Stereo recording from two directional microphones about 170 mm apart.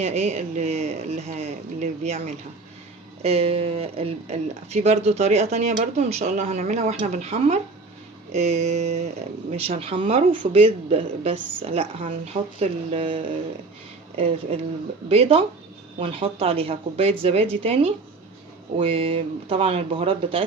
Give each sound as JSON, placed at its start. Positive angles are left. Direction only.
{"t": 0.0, "sound": "speech", "side_deg": -40}